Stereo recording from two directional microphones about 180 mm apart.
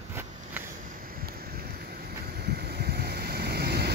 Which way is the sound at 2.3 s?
60° right (ahead or behind).